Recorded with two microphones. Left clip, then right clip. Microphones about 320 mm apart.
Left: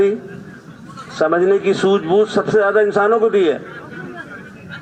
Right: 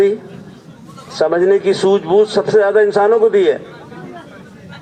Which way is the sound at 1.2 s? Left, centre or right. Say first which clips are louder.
Right 2 dB; right.